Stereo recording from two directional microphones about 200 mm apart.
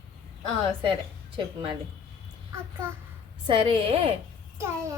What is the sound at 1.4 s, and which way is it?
Speech, 25° right (ahead or behind).